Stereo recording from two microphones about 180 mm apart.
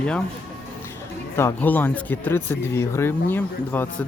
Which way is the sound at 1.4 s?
10° left (ahead or behind).